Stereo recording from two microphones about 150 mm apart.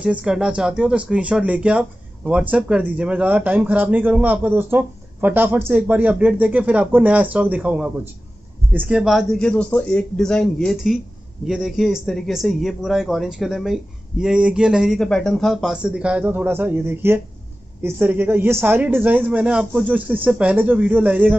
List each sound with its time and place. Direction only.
0.0 s a man's voice: 5° right (ahead or behind)